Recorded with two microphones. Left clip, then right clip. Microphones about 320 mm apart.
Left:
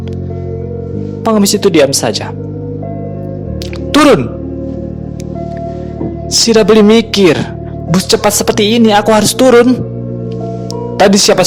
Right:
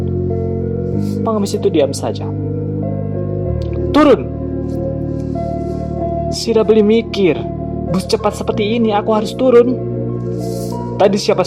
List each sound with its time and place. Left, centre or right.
1.2 s speech: left
3.9 s speech: left
6.3 s speech: left
10.9 s speech: left